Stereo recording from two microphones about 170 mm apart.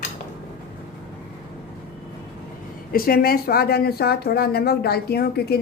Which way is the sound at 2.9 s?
60° left (ahead or behind).